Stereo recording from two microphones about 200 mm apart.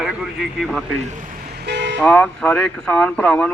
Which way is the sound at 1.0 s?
40° right (ahead or behind).